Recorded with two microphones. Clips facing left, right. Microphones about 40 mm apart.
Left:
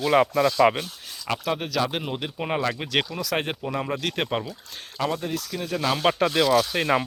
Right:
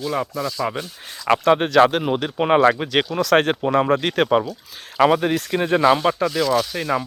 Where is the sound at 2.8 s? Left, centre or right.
Centre.